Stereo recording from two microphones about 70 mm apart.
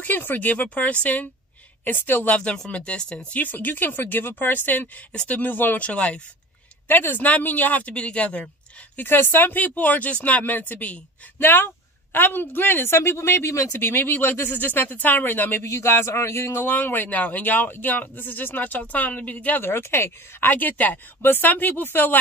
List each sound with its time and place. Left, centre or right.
0.0 s a man's voice: left
5.1 s speech: centre
5.4 s a man's voice: left
5.9 s speech: centre
6.9 s a man's voice: left
8.9 s a man's voice: left
13.7 s a man's voice: left
15.6 s a man's voice: left